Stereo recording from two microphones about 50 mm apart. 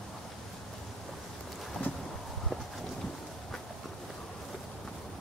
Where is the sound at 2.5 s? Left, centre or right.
Centre.